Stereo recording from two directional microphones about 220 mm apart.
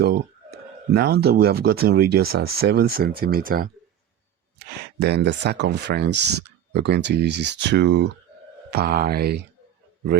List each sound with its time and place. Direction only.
0.9 s speech: 45° right (ahead or behind)